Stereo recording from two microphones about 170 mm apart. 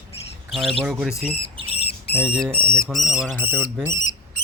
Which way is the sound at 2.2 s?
5° right (ahead or behind).